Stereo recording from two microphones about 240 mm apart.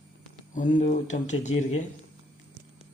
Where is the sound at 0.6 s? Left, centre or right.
Left.